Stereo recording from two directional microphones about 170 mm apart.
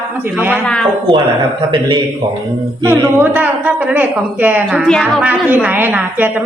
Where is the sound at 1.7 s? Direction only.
30° right (ahead or behind).